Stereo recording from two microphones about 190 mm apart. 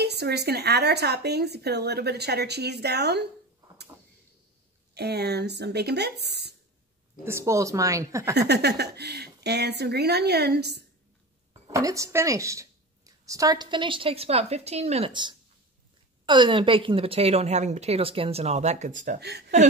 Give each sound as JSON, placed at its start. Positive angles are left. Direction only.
{"t": 0.0, "sound": "a woman's voice", "side_deg": -60}
{"t": 4.9, "sound": "a woman's voice", "side_deg": -60}
{"t": 7.2, "sound": "a woman's voice", "side_deg": -15}
{"t": 8.4, "sound": "a woman's voice", "side_deg": -60}
{"t": 11.7, "sound": "a woman's voice", "side_deg": -15}